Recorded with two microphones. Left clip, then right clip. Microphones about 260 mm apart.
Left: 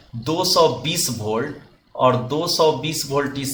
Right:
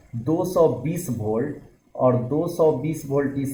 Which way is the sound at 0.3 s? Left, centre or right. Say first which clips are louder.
Left 3 dB; left.